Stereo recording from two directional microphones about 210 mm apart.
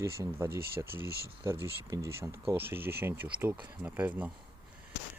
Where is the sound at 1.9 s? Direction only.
15° right (ahead or behind).